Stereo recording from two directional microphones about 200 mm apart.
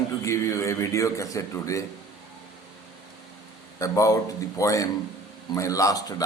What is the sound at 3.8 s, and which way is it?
A man's voice, 15° left (ahead or behind).